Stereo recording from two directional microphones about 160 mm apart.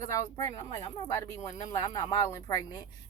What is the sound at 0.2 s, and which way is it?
Speech, 20° left (ahead or behind).